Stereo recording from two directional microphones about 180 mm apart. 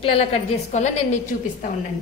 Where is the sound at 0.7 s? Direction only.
40° left (ahead or behind).